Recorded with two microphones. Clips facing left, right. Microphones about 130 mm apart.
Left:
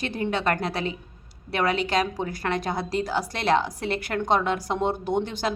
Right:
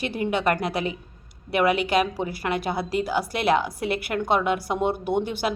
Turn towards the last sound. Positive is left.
turn(degrees=-10)  # may be behind; listen again after turning